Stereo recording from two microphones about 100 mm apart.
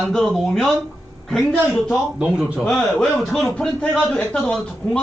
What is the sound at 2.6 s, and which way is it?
A man's voice, 5° left (ahead or behind).